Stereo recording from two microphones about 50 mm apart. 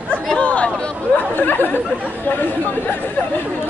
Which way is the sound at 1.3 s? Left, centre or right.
Left.